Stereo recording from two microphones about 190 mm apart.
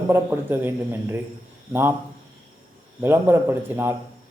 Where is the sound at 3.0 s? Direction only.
10° right (ahead or behind).